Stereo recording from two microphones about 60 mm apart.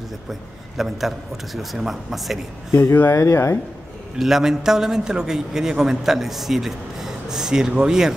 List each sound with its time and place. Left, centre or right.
0.3 s a man's voice: centre
2.7 s speech: left
4.2 s a man's voice: centre